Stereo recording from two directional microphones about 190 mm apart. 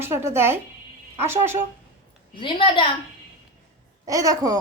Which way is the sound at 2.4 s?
25° left (ahead or behind).